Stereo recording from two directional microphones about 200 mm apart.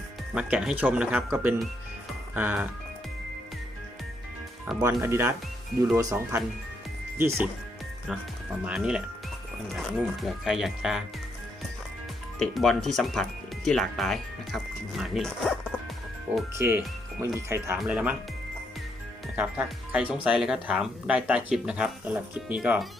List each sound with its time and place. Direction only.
0.3 s speech: 5° right (ahead or behind)
4.8 s speech: 15° right (ahead or behind)
8.6 s speech: 5° right (ahead or behind)
12.4 s speech: centre (ahead or behind)
16.6 s speech: 10° right (ahead or behind)
19.4 s speech: 10° right (ahead or behind)